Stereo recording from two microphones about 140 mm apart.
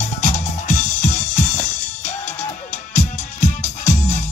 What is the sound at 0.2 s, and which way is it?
Music, 60° left (ahead or behind).